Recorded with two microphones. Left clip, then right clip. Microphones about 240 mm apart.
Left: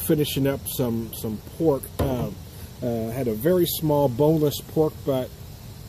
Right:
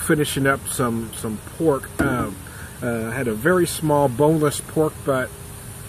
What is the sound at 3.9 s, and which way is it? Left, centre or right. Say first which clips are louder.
Speech: right 3 dB; right.